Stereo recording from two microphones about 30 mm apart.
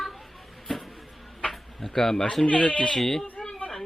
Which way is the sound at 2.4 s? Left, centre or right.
Left.